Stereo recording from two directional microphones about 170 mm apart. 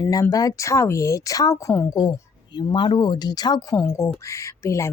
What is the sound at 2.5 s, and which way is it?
Speech, 30° left (ahead or behind).